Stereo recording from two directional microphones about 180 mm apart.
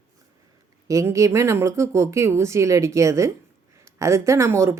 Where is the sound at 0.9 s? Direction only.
15° right (ahead or behind).